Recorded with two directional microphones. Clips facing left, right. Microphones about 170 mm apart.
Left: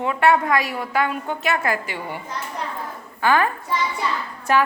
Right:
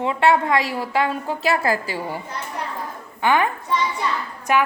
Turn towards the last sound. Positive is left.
turn(degrees=-15)  # may be behind; listen again after turning